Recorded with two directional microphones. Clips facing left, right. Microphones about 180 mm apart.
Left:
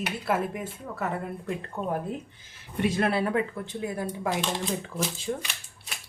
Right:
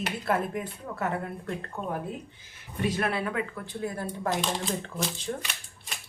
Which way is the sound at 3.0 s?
30° left (ahead or behind).